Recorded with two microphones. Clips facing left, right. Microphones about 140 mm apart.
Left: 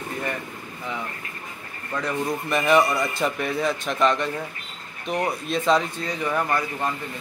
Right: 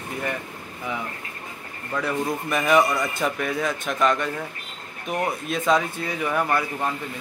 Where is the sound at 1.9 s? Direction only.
5° right (ahead or behind).